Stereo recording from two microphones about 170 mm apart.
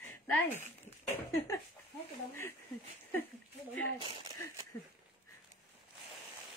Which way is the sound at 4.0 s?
30° right (ahead or behind).